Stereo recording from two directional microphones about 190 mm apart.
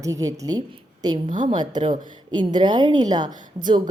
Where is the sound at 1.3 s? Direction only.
40° right (ahead or behind).